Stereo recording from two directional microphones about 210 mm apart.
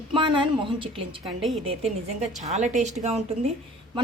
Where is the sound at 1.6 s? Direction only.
30° right (ahead or behind).